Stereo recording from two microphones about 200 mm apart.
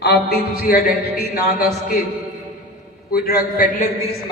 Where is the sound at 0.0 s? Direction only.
50° left (ahead or behind).